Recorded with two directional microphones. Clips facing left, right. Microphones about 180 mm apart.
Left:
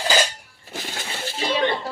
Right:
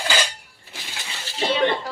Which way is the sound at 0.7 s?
45° left (ahead or behind).